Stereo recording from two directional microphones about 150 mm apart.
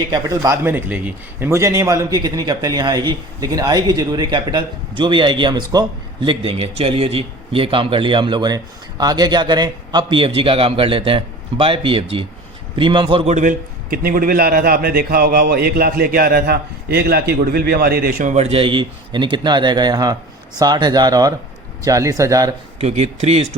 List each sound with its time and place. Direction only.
0.1 s a man's voice: 20° right (ahead or behind)
13.3 s a man's voice: 60° right (ahead or behind); by 22.5 s 20° right (ahead or behind)
22.8 s speech: 45° right (ahead or behind)